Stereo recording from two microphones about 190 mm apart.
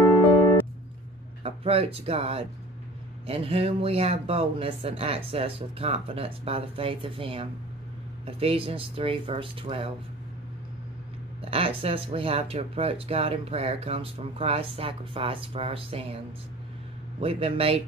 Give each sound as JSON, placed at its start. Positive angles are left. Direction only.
{"t": 1.4, "sound": "speech", "side_deg": -30}
{"t": 11.5, "sound": "speech", "side_deg": -30}
{"t": 17.2, "sound": "speech", "side_deg": -30}